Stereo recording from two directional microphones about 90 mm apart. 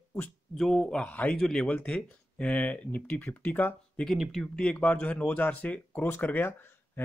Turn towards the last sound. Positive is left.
turn(degrees=20)  # may be behind; listen again after turning